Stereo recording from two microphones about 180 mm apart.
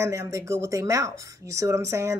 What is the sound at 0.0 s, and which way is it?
Speech, 15° right (ahead or behind).